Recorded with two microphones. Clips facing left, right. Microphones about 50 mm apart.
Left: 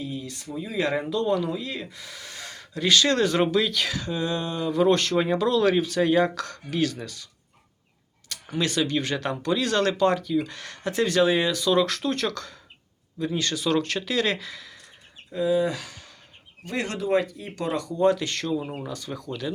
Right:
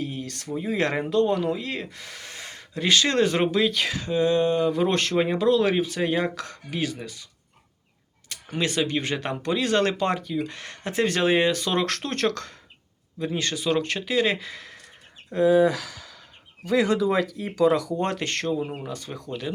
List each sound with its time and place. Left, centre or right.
0.0 s a sound: right
0.5 s speech: right
0.9 s speech: right
5.1 s speech: centre
8.5 s speech: right
13.1 s speech: right
15.3 s speech: right
17.3 s speech: right
18.0 s speech: right